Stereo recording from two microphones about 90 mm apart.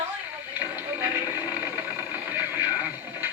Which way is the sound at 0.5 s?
20° right (ahead or behind).